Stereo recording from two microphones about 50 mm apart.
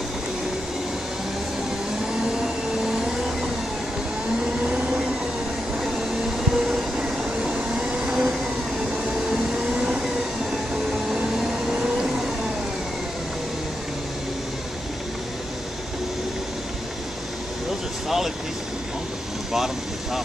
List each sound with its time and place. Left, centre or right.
2.3 s vacuum cleaner: centre
4.6 s train: centre
6.5 s train: centre
9.5 s train: centre
11.1 s a sound: centre
18.0 s vehicle: centre
19.5 s vehicle: centre